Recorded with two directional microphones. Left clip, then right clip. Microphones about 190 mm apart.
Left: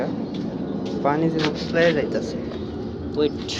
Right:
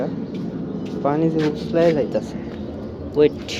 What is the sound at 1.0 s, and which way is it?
Speech, 35° right (ahead or behind).